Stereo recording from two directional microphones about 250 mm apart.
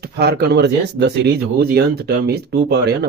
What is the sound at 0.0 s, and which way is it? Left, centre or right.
Speech, right.